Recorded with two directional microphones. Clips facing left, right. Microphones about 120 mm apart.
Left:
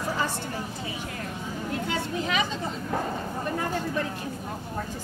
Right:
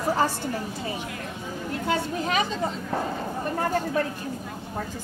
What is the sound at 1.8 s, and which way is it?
Speech, 40° right (ahead or behind).